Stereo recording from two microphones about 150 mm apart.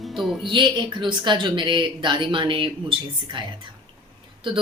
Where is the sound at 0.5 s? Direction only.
30° right (ahead or behind).